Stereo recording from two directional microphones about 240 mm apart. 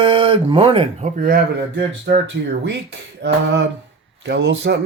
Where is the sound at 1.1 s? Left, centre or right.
Right.